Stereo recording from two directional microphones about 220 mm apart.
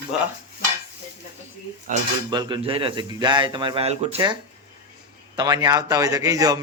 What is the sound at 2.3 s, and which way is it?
Speech, 20° right (ahead or behind).